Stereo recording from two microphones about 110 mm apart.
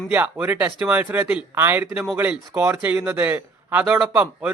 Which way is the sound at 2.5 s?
25° right (ahead or behind).